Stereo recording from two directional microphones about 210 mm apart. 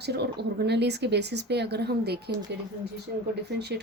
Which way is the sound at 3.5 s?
50° right (ahead or behind).